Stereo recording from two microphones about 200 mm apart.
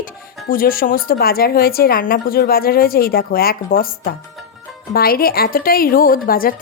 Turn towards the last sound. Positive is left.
turn(degrees=45)  # may be behind; listen again after turning